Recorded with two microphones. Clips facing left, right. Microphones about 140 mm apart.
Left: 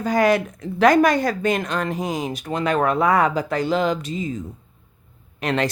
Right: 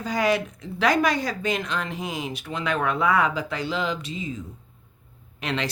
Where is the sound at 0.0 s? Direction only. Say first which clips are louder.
Left 5 dB; 50° left (ahead or behind).